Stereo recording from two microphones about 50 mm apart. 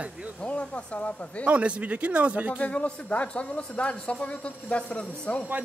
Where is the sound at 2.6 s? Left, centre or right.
Left.